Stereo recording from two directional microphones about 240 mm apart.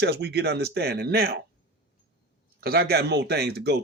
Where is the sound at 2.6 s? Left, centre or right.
Right.